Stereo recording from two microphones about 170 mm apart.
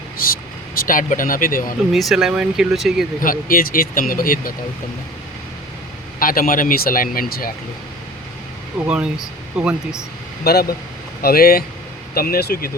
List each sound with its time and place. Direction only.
0.2 s speech: 60° left (ahead or behind)
1.9 s speech: centre (ahead or behind)
3.2 s speech: 60° left (ahead or behind)
6.1 s speech: 55° left (ahead or behind)
9.6 s speech: 5° right (ahead or behind)
10.4 s speech: 65° left (ahead or behind)